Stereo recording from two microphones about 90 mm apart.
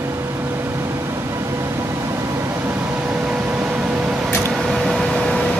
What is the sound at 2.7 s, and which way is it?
Vehicle, 15° right (ahead or behind).